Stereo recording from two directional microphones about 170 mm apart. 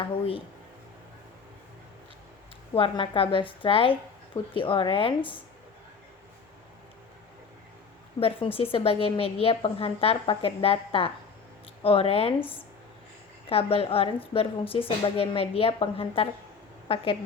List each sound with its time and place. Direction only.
0.0 s a woman's voice: 30° left (ahead or behind)
2.7 s a woman's voice: 30° left (ahead or behind)
8.2 s a woman's voice: 35° left (ahead or behind)